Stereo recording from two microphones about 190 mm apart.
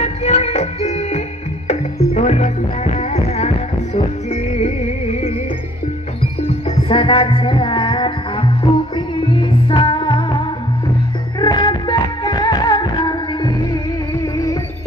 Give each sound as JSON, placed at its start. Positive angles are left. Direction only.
{"t": 0.0, "sound": "music", "side_deg": 35}
{"t": 6.4, "sound": "music", "side_deg": 30}